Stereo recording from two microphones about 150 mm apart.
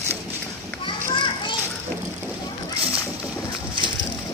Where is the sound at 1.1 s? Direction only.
30° left (ahead or behind).